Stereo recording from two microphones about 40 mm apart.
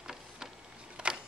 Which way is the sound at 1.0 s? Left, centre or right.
Right.